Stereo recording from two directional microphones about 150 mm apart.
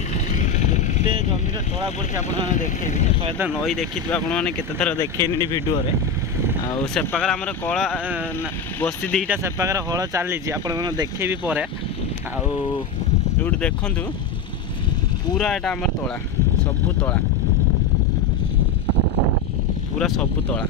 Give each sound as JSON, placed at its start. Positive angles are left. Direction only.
{"t": 0.1, "sound": "vehicle", "side_deg": 50}
{"t": 2.1, "sound": "speech", "side_deg": 55}
{"t": 3.6, "sound": "speech", "side_deg": 5}
{"t": 6.9, "sound": "speech", "side_deg": 10}
{"t": 9.3, "sound": "speech", "side_deg": -20}
{"t": 13.4, "sound": "speech", "side_deg": 10}
{"t": 15.3, "sound": "speech", "side_deg": 5}
{"t": 20.0, "sound": "speech", "side_deg": 5}